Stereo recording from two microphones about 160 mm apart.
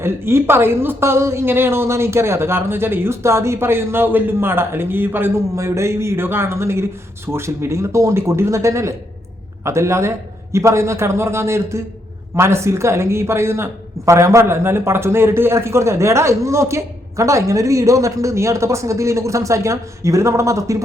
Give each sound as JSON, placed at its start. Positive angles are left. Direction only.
{"t": 0.0, "sound": "speech", "side_deg": -15}